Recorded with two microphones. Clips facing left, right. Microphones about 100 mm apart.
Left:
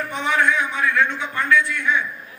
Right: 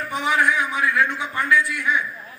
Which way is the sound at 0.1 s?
15° right (ahead or behind).